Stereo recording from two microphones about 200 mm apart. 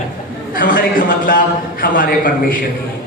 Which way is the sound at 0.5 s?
45° left (ahead or behind).